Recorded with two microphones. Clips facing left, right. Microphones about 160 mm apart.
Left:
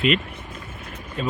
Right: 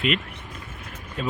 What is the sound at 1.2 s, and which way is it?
Speech, 5° right (ahead or behind).